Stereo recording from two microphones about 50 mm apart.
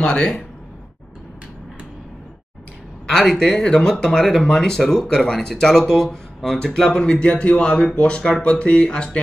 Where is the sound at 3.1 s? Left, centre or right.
Centre.